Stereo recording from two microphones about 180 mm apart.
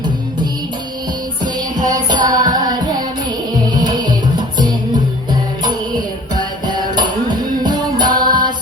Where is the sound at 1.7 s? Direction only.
20° right (ahead or behind).